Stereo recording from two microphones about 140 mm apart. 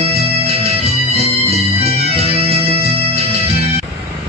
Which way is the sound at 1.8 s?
45° right (ahead or behind).